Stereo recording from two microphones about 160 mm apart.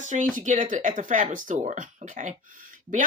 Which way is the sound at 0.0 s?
50° right (ahead or behind).